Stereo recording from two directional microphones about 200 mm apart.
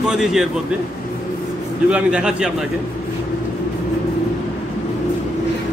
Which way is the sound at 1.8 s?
5° right (ahead or behind).